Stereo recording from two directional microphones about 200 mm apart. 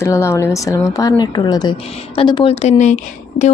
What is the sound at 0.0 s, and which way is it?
A woman's voice, 15° left (ahead or behind).